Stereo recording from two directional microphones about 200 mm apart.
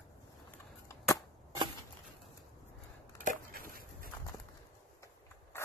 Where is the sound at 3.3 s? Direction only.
45° right (ahead or behind).